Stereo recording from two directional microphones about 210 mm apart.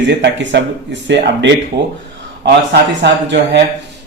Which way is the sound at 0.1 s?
55° right (ahead or behind).